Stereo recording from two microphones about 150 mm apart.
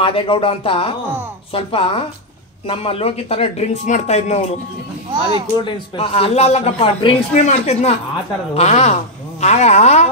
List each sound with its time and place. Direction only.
0.0 s speech: 35° left (ahead or behind)
5.6 s speech: 35° left (ahead or behind)
7.3 s a woman's voice: 50° left (ahead or behind)